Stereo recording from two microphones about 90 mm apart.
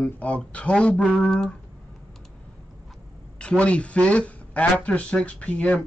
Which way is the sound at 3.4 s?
10° left (ahead or behind).